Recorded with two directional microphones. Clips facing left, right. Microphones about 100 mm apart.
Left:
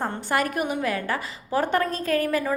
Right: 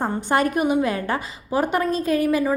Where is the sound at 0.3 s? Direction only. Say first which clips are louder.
Right 5 dB; 25° right (ahead or behind).